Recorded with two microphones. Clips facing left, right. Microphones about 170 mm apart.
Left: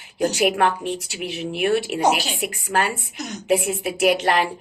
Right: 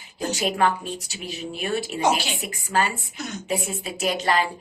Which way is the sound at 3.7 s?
70° left (ahead or behind).